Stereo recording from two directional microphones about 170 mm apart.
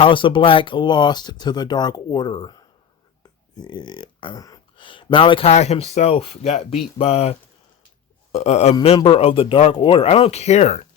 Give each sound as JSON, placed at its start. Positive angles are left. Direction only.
{"t": 0.0, "sound": "a man's voice", "side_deg": 30}